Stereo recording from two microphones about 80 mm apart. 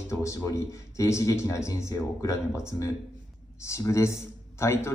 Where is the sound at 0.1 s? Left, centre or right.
Left.